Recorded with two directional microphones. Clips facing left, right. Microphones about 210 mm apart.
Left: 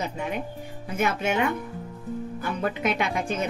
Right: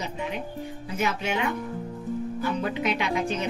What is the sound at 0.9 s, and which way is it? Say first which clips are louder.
Speech: left 3 dB; 50° left (ahead or behind).